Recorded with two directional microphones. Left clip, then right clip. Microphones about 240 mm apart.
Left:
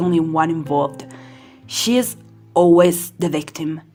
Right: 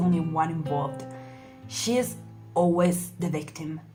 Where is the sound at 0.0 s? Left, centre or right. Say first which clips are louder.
Left 9 dB; left.